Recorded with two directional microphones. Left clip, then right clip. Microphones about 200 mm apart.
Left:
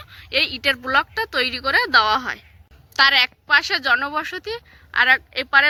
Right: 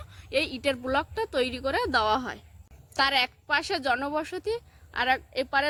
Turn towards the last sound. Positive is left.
turn(degrees=-30)  # may be behind; listen again after turning